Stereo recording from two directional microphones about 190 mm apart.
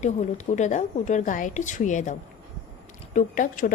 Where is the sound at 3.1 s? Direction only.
45° left (ahead or behind).